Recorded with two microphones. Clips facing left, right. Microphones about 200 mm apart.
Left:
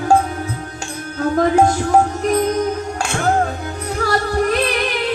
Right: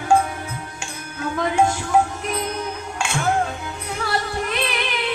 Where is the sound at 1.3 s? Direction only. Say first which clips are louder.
Left 6 dB; 45° left (ahead or behind).